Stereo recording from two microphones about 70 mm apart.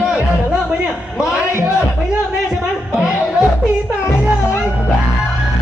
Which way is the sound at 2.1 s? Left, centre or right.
Centre.